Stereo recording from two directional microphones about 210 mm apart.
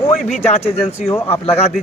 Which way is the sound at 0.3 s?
30° left (ahead or behind).